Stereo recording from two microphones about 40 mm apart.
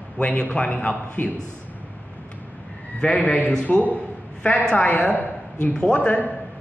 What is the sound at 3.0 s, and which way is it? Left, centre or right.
Speech, left.